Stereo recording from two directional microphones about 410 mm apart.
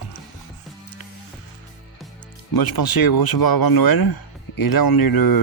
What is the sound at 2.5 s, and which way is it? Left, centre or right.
Speech, left.